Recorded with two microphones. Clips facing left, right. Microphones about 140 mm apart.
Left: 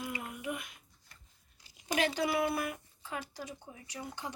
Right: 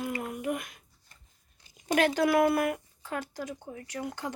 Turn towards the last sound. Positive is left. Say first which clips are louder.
# right 7 dB
turn(degrees=-80)